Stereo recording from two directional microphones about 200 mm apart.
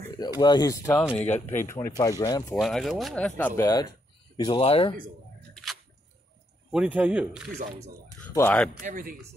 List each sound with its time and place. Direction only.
0.0 s speech: 20° left (ahead or behind)
2.5 s speech: centre (ahead or behind); by 4.9 s 30° left (ahead or behind)
5.5 s squish: centre (ahead or behind)
6.7 s a man's voice: 5° right (ahead or behind)
8.2 s a sound: 10° left (ahead or behind)
8.8 s speech: 45° right (ahead or behind)